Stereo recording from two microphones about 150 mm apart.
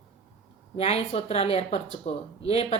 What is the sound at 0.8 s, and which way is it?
Speech, 45° left (ahead or behind).